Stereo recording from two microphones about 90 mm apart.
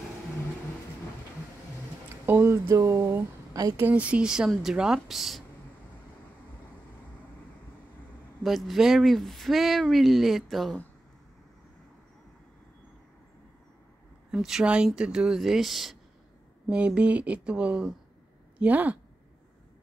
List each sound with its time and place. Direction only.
2.2 s speech: 30° right (ahead or behind)
3.8 s speech: 15° right (ahead or behind)
8.5 s speech: centre (ahead or behind)
14.3 s speech: 5° right (ahead or behind)
16.6 s speech: 15° right (ahead or behind)